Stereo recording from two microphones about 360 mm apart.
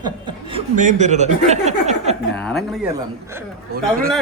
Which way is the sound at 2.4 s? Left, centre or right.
Centre.